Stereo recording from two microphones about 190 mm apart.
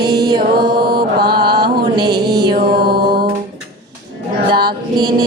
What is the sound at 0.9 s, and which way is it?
Mantra, 55° right (ahead or behind).